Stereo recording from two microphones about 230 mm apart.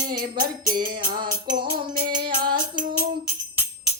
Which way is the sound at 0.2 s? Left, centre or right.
Right.